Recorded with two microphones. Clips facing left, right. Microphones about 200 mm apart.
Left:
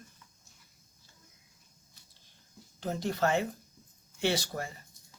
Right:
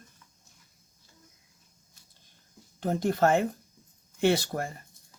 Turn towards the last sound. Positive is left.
turn(degrees=-55)  # may be behind; listen again after turning